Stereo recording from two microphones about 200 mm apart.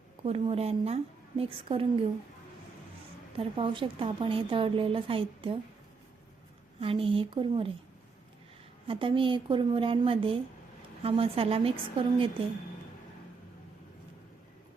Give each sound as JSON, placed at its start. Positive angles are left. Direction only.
{"t": 0.2, "sound": "a woman's voice", "side_deg": -30}
{"t": 3.3, "sound": "a woman's voice", "side_deg": -25}
{"t": 6.7, "sound": "a woman's voice", "side_deg": -25}
{"t": 8.9, "sound": "a woman's voice", "side_deg": -25}